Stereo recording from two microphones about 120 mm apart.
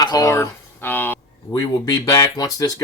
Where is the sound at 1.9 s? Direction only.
30° left (ahead or behind).